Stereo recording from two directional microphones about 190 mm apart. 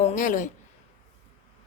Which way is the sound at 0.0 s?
40° left (ahead or behind).